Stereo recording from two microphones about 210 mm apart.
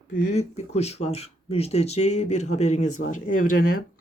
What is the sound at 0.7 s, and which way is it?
Speech, 30° left (ahead or behind).